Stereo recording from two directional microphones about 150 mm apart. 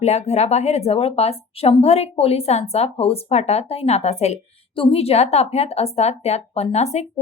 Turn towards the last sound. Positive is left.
turn(degrees=45)  # may be behind; listen again after turning